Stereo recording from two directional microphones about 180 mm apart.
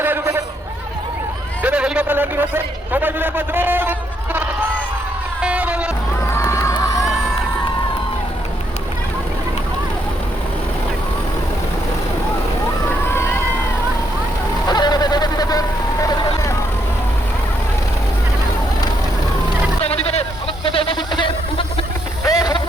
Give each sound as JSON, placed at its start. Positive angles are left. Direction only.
{"t": 0.0, "sound": "a sound", "side_deg": -15}
{"t": 1.6, "sound": "a man's voice", "side_deg": -5}
{"t": 5.4, "sound": "music", "side_deg": -5}
{"t": 6.3, "sound": "crowd", "side_deg": 15}
{"t": 14.7, "sound": "vehicle", "side_deg": 25}
{"t": 19.8, "sound": "vehicle", "side_deg": 35}
{"t": 20.7, "sound": "a sound", "side_deg": 30}
{"t": 22.2, "sound": "vehicle", "side_deg": 20}